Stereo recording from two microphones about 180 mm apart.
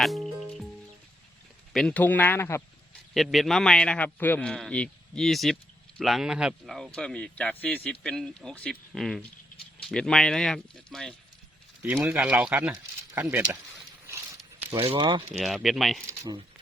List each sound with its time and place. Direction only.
0.0 s music: centre (ahead or behind)
1.7 s a man's voice: 5° left (ahead or behind)
3.2 s speech: centre (ahead or behind)
11.8 s speech: 10° right (ahead or behind)
14.7 s speech: 30° right (ahead or behind)
15.4 s speech: centre (ahead or behind)
16.0 s speech: 20° right (ahead or behind)